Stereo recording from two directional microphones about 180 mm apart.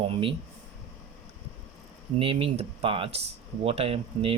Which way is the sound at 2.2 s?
30° right (ahead or behind).